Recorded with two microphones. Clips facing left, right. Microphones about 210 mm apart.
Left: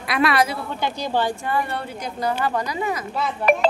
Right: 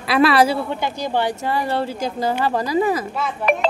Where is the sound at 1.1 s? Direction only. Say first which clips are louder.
Right 1 dB; 20° right (ahead or behind).